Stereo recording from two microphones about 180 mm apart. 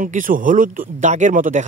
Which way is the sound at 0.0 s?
45° right (ahead or behind).